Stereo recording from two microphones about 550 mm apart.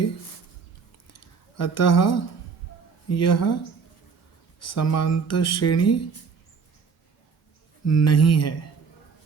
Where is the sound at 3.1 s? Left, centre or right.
Left.